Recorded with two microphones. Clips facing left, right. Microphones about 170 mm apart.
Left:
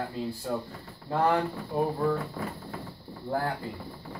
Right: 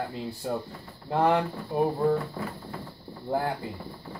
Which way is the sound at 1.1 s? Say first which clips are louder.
Right 2 dB; 20° right (ahead or behind).